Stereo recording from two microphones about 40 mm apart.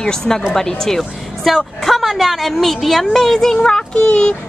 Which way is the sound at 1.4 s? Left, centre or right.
Centre.